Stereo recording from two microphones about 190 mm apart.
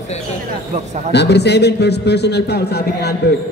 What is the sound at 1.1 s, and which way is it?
A man's voice, 60° left (ahead or behind).